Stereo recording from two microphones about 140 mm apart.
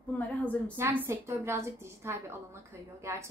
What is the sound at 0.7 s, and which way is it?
A woman's voice, 15° right (ahead or behind).